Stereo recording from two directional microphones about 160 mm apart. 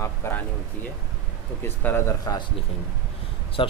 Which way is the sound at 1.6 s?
15° left (ahead or behind).